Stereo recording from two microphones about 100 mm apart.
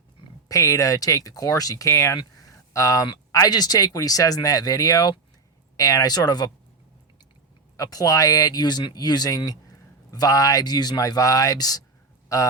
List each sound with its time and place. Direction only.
0.4 s speech: 35° left (ahead or behind)
7.8 s speech: 40° left (ahead or behind)